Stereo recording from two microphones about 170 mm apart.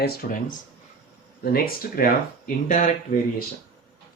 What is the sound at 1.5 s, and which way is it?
Speech, 60° left (ahead or behind).